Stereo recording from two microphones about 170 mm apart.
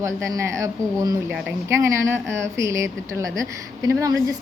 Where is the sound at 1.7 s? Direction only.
15° right (ahead or behind).